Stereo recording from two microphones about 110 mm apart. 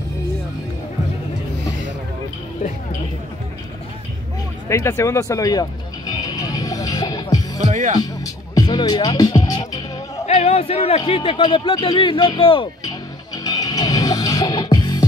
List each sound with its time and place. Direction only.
4.6 s music: 25° left (ahead or behind)
8.6 s speech: 45° left (ahead or behind)
10.2 s music: 70° left (ahead or behind)
11.1 s speech: 55° left (ahead or behind)
13.4 s music: 35° left (ahead or behind)